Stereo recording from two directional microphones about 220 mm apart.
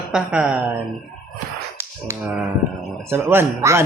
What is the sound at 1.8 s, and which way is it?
Speech, 10° right (ahead or behind).